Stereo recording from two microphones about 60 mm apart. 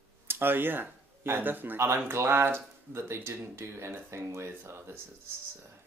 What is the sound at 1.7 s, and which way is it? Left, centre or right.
Speech, right.